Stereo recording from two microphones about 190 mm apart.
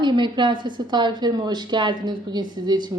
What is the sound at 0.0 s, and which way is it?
A woman's voice, 25° right (ahead or behind).